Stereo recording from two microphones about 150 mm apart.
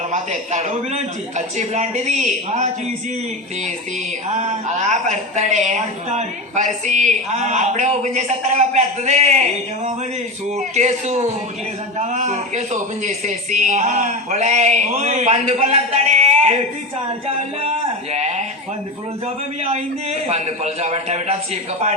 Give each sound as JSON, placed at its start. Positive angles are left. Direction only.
{"t": 0.1, "sound": "a woman's voice", "side_deg": -50}
{"t": 4.3, "sound": "a woman's voice", "side_deg": -50}
{"t": 18.1, "sound": "a sound", "side_deg": -50}
{"t": 19.6, "sound": "a woman's voice", "side_deg": -45}